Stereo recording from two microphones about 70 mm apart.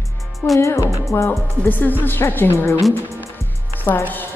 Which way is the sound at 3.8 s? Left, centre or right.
Left.